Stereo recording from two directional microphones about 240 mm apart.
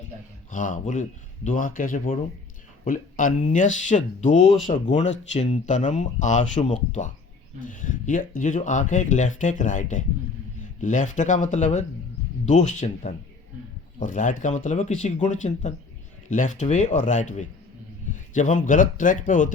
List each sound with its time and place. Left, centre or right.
0.5 s speech: left